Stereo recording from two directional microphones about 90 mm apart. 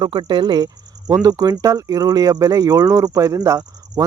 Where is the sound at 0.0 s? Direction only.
60° right (ahead or behind).